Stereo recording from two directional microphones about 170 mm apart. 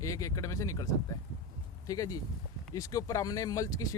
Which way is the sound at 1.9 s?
20° left (ahead or behind).